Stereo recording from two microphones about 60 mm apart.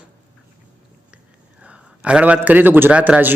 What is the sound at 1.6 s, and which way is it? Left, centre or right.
A man's voice, centre.